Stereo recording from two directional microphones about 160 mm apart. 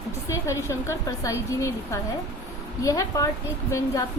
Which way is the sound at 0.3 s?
20° left (ahead or behind).